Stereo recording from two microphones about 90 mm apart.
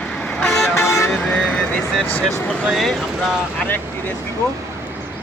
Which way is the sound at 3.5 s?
20° left (ahead or behind).